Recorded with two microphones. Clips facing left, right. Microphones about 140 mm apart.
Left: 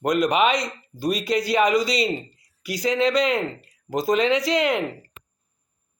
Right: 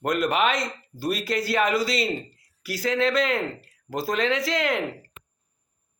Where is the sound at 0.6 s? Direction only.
5° right (ahead or behind).